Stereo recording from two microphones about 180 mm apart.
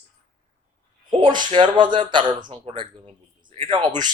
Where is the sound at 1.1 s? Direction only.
25° right (ahead or behind).